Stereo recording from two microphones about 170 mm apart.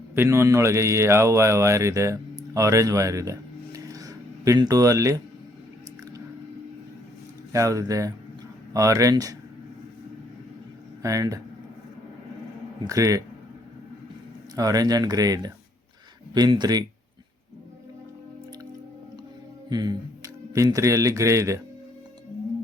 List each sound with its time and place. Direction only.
0.1 s speech: 15° right (ahead or behind)
7.5 s speech: 20° right (ahead or behind)
11.0 s speech: 20° right (ahead or behind)
12.8 s speech: 20° right (ahead or behind)
14.5 s speech: 20° right (ahead or behind)
19.7 s speech: 25° right (ahead or behind)